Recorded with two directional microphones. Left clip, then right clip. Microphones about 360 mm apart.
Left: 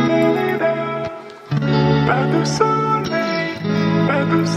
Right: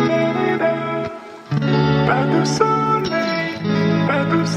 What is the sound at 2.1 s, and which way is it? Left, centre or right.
Music, centre.